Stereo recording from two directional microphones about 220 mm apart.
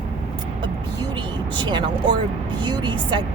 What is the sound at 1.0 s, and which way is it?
Vehicle, 20° right (ahead or behind).